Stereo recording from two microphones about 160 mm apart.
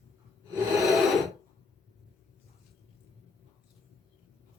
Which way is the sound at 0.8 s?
Centre (ahead or behind).